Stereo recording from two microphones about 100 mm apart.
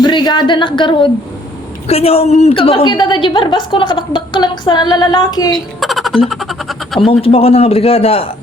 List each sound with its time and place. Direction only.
0.0 s speech: 50° left (ahead or behind)
1.9 s a woman's voice: 90° left; by 2.8 s 75° left (ahead or behind)
2.8 s a woman's voice: 50° left (ahead or behind)
5.5 s a sound: centre (ahead or behind)
7.1 s a man's voice: 70° left (ahead or behind)